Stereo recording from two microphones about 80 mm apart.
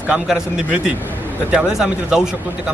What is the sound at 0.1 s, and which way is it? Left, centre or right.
Speech, centre.